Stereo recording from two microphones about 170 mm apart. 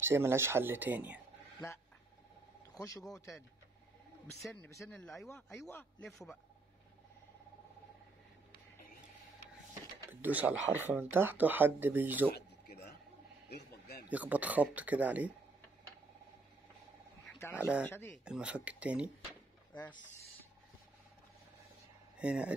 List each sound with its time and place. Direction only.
0.0 s speech: 15° right (ahead or behind)
2.7 s speech: 20° left (ahead or behind)
4.7 s speech: 5° left (ahead or behind)
6.0 s a man's voice: centre (ahead or behind)
10.0 s speech: 10° right (ahead or behind)
12.4 s a sound: 75° left (ahead or behind)
14.0 s speech: 10° right (ahead or behind)
17.4 s speech: 15° left (ahead or behind)
18.2 s speech: 5° right (ahead or behind)
19.7 s speech: 25° left (ahead or behind)
22.2 s speech: 5° right (ahead or behind)